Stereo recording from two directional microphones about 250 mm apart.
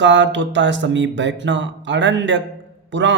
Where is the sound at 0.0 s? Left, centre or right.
Right.